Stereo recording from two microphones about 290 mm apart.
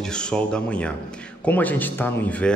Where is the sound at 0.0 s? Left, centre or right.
Centre.